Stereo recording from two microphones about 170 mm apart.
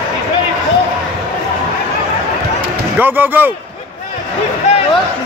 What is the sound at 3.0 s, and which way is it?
Speech, 10° right (ahead or behind).